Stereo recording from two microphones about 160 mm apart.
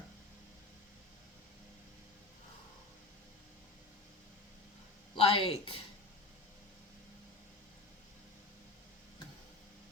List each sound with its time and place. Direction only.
5.1 s speech: 35° left (ahead or behind)